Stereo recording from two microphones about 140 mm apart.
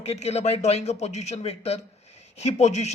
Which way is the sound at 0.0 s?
50° left (ahead or behind).